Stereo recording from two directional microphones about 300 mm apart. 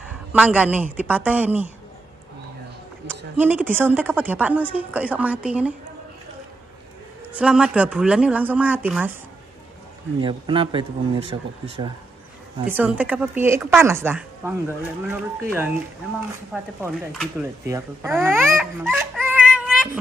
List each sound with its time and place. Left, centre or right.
0.3 s speech: centre
3.3 s speech: centre
7.3 s speech: centre
10.2 s speech: centre
12.6 s speech: centre
16.8 s speech: centre